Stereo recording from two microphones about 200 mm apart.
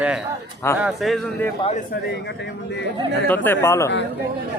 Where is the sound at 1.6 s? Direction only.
30° left (ahead or behind).